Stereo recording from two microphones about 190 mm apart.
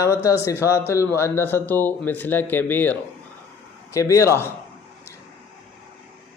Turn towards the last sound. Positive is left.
turn(degrees=15)  # may be behind; listen again after turning